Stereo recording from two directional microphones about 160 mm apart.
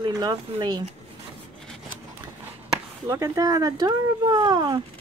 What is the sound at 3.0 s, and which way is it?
Speech, 20° right (ahead or behind).